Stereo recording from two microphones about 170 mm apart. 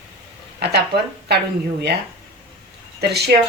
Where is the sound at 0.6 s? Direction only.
75° right (ahead or behind).